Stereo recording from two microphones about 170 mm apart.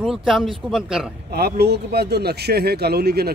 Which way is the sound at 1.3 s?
65° right (ahead or behind).